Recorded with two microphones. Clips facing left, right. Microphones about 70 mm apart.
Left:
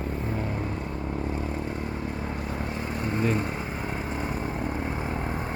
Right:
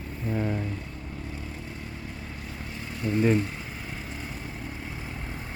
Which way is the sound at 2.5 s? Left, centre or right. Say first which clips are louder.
Left 7 dB; left.